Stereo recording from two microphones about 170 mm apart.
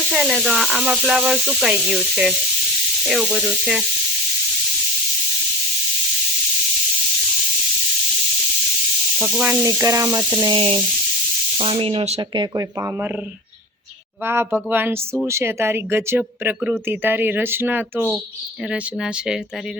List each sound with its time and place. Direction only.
0.1 s speech: centre (ahead or behind)
9.1 s speech: centre (ahead or behind)
9.6 s speech: 20° right (ahead or behind)
10.4 s speech: 30° right (ahead or behind)
12.4 s speech: 20° right (ahead or behind)
14.3 s speech: 10° right (ahead or behind)